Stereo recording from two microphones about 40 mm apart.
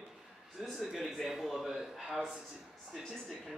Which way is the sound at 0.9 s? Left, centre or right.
Centre.